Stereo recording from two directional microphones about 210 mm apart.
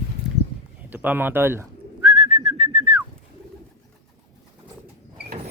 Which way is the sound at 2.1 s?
25° right (ahead or behind).